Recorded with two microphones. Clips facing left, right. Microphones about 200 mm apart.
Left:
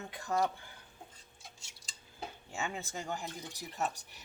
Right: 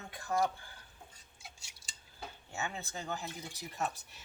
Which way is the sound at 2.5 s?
15° left (ahead or behind).